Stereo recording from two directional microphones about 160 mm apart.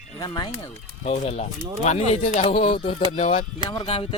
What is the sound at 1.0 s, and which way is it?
Speech, 40° left (ahead or behind).